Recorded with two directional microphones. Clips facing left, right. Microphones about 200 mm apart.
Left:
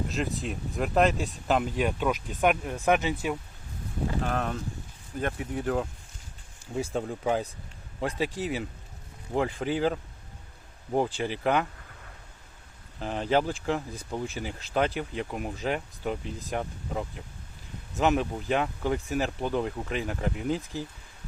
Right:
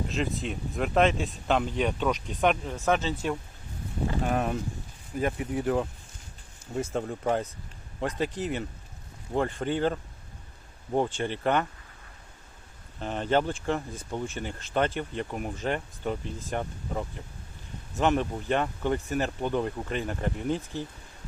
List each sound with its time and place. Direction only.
0.1 s speech: centre (ahead or behind)
4.2 s speech: 10° right (ahead or behind)
11.2 s speech: 5° left (ahead or behind)
13.0 s speech: centre (ahead or behind)